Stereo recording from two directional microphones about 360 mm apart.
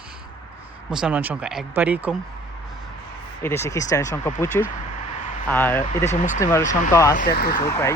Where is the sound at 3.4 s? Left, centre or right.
Centre.